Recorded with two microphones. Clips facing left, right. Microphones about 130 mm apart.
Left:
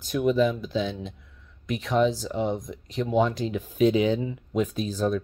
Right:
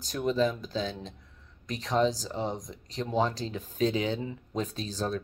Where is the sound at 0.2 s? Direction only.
10° left (ahead or behind).